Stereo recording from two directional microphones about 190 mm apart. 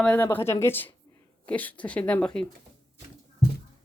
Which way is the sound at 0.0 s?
10° left (ahead or behind).